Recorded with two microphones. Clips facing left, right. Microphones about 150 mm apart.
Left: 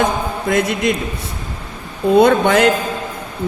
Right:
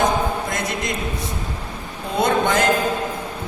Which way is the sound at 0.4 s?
65° left (ahead or behind).